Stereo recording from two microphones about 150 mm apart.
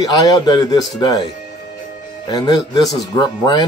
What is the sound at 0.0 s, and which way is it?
Speech, 25° left (ahead or behind).